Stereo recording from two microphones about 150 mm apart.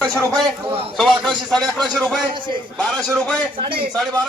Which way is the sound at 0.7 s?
40° right (ahead or behind).